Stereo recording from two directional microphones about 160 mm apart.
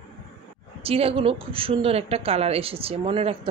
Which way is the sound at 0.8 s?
35° right (ahead or behind).